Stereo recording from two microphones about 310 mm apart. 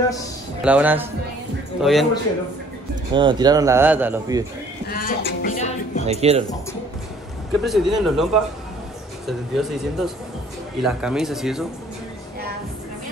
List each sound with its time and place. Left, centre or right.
0.6 s speech: centre
3.1 s speech: centre
4.8 s music: left
6.0 s speech: centre
7.6 s speech: centre